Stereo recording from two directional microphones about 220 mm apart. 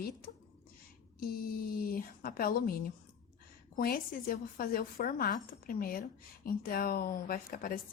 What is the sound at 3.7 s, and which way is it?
A woman's voice, 40° left (ahead or behind).